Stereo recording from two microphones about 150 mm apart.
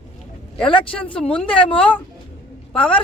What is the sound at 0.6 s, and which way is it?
Speech, 35° left (ahead or behind).